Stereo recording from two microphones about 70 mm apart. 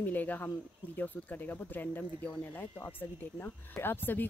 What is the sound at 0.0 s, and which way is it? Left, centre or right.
Speech, left.